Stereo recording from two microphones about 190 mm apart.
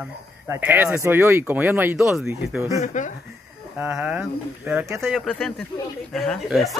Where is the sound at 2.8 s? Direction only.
40° left (ahead or behind).